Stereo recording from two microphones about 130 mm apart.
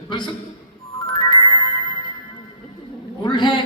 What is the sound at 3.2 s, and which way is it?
Speech, 35° left (ahead or behind).